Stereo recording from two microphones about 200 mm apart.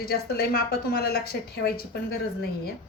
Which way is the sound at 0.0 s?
50° left (ahead or behind).